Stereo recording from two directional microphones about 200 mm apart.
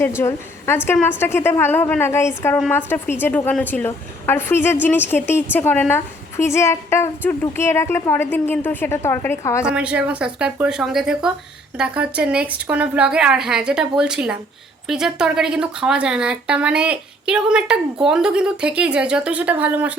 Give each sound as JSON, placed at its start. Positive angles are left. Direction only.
{"t": 0.2, "sound": "a woman's voice", "side_deg": 15}
{"t": 9.6, "sound": "speech", "side_deg": -5}